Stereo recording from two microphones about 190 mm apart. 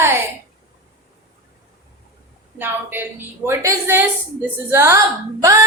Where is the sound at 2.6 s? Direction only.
10° right (ahead or behind).